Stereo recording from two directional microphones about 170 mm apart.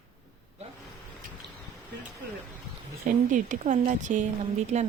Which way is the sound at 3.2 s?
50° right (ahead or behind).